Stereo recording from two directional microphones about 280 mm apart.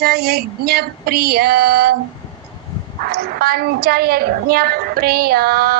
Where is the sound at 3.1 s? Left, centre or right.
Right.